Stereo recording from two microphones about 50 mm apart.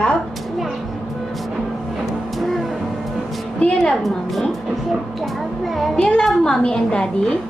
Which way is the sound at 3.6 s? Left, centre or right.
Left.